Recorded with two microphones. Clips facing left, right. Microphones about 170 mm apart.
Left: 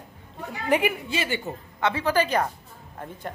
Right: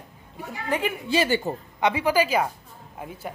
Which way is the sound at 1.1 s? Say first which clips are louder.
Right 6 dB; 35° right (ahead or behind).